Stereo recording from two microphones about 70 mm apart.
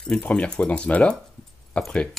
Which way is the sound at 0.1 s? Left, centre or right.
Centre.